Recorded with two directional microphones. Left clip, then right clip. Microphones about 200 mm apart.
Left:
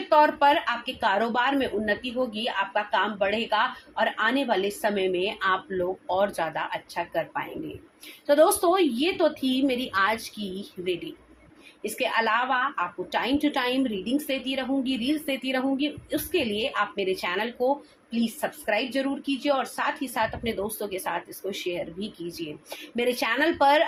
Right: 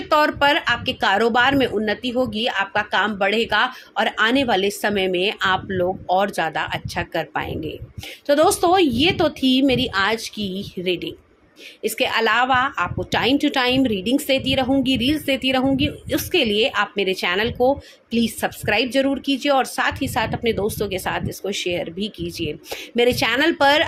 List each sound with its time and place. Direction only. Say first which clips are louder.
0.1 s a woman's voice: right 3 dB; 55° right (ahead or behind)